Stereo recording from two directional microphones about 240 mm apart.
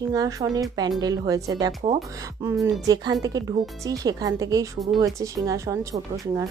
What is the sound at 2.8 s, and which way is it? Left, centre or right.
A woman's voice, centre.